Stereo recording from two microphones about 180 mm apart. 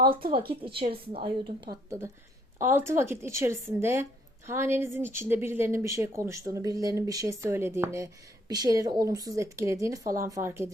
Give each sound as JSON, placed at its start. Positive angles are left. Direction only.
{"t": 0.0, "sound": "speech", "side_deg": -55}
{"t": 0.3, "sound": "a woman's voice", "side_deg": -30}
{"t": 2.6, "sound": "a woman's voice", "side_deg": -15}